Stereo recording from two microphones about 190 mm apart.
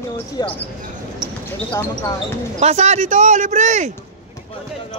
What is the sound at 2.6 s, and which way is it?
A man's voice, 35° right (ahead or behind).